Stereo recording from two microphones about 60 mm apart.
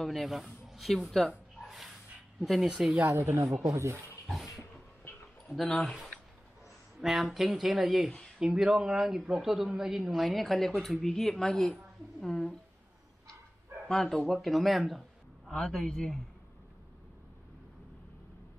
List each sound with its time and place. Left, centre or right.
0.0 s a man's voice: centre
1.6 s snort: centre
2.4 s speech: centre
2.9 s speech: right
5.5 s speech: centre
7.0 s speech: centre
13.8 s a man's voice: centre